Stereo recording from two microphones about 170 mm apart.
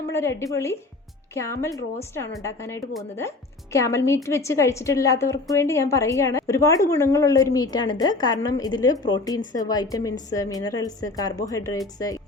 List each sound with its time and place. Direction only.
0.1 s a woman's voice: 15° left (ahead or behind)